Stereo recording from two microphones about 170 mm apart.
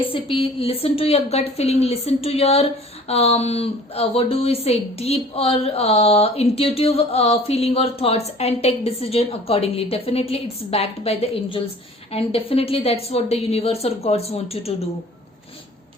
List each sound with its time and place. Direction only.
0.0 s a woman's voice: 30° left (ahead or behind)